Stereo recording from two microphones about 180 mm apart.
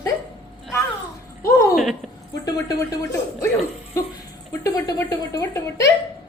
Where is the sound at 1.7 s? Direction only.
Centre (ahead or behind).